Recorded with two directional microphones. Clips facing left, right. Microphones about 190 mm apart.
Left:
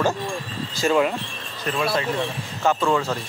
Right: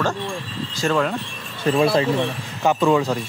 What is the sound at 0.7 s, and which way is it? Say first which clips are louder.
Speech: left 1 dB; 5° left (ahead or behind).